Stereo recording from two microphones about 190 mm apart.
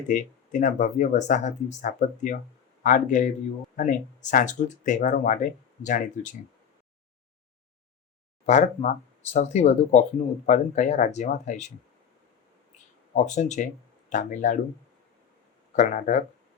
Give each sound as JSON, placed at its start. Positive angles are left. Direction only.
{"t": 0.1, "sound": "speech", "side_deg": 40}
{"t": 8.4, "sound": "speech", "side_deg": 40}
{"t": 13.1, "sound": "speech", "side_deg": 40}
{"t": 15.7, "sound": "speech", "side_deg": 40}